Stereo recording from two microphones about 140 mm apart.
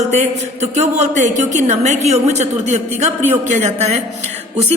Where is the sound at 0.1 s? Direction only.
55° right (ahead or behind).